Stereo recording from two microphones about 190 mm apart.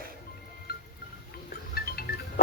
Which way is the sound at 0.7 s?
55° left (ahead or behind).